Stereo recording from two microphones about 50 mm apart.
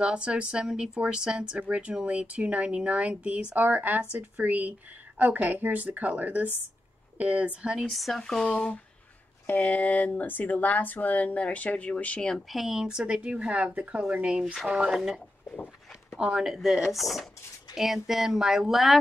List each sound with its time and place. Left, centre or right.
0.0 s speech: right
1.6 s a woman's voice: right
7.9 s speech: centre
9.5 s speech: left
12.4 s speech: centre
12.8 s speech: centre
14.4 s speech: centre
14.9 s speech: centre
16.3 s speech: centre